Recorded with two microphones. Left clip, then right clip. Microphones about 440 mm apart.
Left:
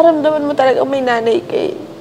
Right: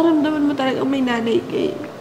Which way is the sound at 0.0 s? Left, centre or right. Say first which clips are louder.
Left 6 dB; left.